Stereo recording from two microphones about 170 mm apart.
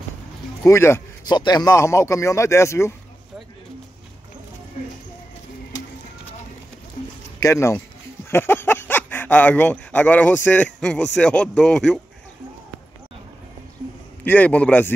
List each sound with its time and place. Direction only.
0.7 s speech: 15° left (ahead or behind)
7.3 s speech: 15° left (ahead or behind)
14.2 s speech: 10° left (ahead or behind)